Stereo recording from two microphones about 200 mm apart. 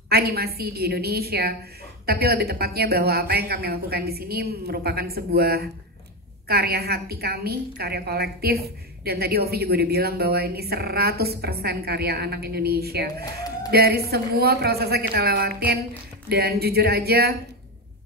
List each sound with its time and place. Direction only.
0.1 s a woman's voice: 50° right (ahead or behind)
13.2 s a sound: 20° left (ahead or behind)
13.7 s a woman's voice: 50° right (ahead or behind)